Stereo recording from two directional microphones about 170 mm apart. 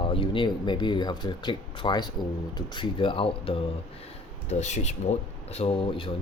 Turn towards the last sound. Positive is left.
turn(degrees=30)  # may be behind; listen again after turning